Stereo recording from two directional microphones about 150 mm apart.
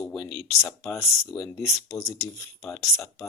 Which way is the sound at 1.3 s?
35° left (ahead or behind).